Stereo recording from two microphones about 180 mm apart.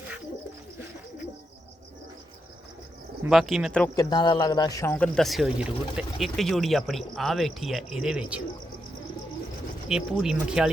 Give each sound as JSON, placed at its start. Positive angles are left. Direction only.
{"t": 3.2, "sound": "speech", "side_deg": 0}
{"t": 3.9, "sound": "speech", "side_deg": 25}
{"t": 4.9, "sound": "speech", "side_deg": 5}
{"t": 9.9, "sound": "speech", "side_deg": -5}